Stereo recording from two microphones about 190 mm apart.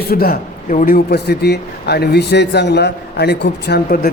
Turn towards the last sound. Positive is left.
turn(degrees=60)  # may be behind; listen again after turning